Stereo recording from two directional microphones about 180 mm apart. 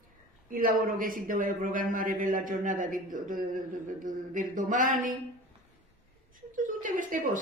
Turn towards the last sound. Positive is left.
turn(degrees=-45)  # may be behind; listen again after turning